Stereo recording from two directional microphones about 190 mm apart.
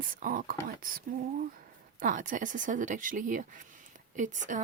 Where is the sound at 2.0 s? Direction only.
45° right (ahead or behind).